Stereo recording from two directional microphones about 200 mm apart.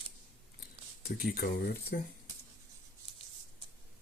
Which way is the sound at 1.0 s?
50° left (ahead or behind).